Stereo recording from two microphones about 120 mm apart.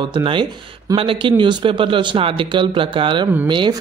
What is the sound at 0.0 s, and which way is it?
Speech, 45° right (ahead or behind).